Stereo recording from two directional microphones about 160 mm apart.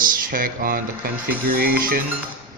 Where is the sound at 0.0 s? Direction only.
60° right (ahead or behind).